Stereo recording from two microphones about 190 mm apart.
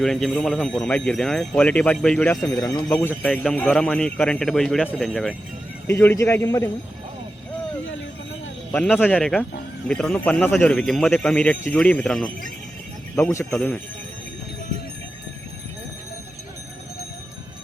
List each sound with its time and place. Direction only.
0.0 s speech: centre (ahead or behind)
2.5 s speech: 20° left (ahead or behind)
8.7 s speech: 5° left (ahead or behind)
13.4 s speech: 5° left (ahead or behind)